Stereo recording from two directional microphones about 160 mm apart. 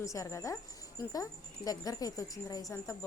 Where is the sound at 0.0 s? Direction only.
20° left (ahead or behind).